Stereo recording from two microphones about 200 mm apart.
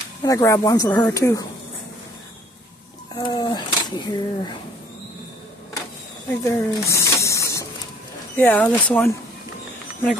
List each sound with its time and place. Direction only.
0.2 s speech: 15° left (ahead or behind)
3.2 s speech: 25° left (ahead or behind)
6.4 s a sound: 15° left (ahead or behind)
8.4 s speech: 10° left (ahead or behind)